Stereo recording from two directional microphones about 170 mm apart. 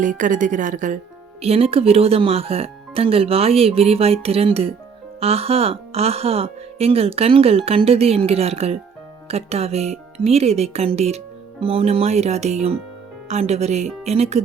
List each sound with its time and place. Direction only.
0.0 s a woman's voice: 50° right (ahead or behind)
1.4 s speech: 35° right (ahead or behind)